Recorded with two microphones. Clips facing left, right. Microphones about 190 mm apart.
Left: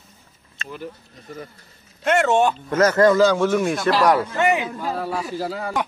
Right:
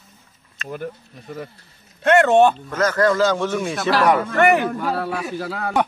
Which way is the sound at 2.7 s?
20° left (ahead or behind).